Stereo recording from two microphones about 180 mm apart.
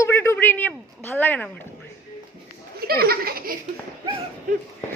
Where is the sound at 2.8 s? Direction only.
55° right (ahead or behind).